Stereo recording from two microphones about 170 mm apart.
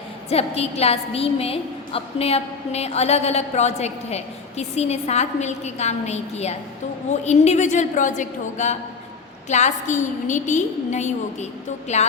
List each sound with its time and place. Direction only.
0.3 s a woman's voice: 35° left (ahead or behind)